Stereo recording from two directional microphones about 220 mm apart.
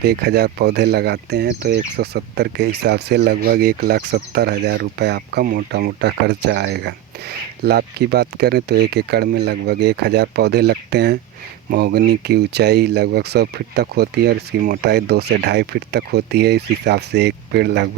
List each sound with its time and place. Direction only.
0.0 s speech: 45° right (ahead or behind)